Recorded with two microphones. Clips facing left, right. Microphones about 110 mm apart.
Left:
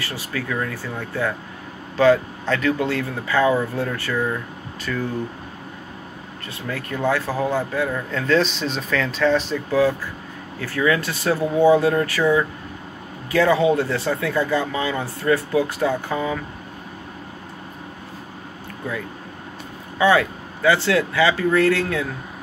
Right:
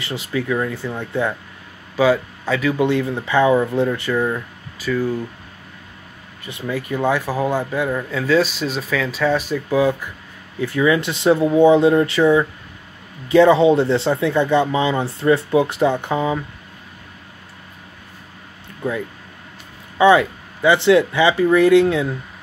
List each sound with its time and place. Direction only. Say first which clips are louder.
0.0 s speech: right 4 dB; 20° right (ahead or behind)
2.0 s speech: left 1 dB; 10° right (ahead or behind)
2.9 s speech: right 4 dB; 20° right (ahead or behind)
4.9 s speech: right 6 dB; centre (ahead or behind)
6.4 s speech: right 5 dB; 15° right (ahead or behind)
20.0 s speech: right 4 dB; 20° right (ahead or behind)